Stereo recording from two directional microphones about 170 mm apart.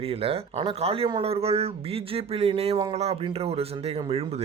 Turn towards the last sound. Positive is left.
turn(degrees=-35)  # may be behind; listen again after turning